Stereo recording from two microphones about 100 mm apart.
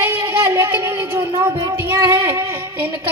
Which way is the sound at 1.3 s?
45° right (ahead or behind).